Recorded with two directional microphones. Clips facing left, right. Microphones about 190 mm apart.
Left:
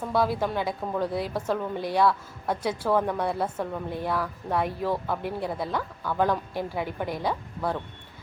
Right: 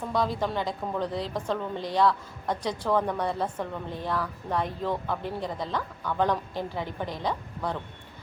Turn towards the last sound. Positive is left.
turn(degrees=10)  # may be behind; listen again after turning